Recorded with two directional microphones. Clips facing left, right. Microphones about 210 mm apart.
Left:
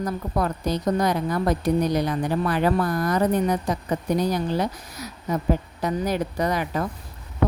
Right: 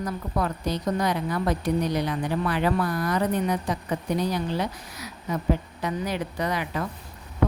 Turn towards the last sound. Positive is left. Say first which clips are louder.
# left 4 dB
turn(degrees=40)  # may be behind; listen again after turning